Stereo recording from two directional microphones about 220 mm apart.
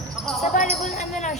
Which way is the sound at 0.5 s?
35° left (ahead or behind).